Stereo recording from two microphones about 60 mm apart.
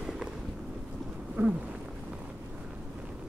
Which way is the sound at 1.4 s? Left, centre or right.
Right.